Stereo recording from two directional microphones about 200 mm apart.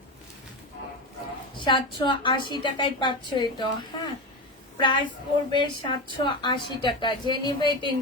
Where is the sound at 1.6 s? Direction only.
25° left (ahead or behind).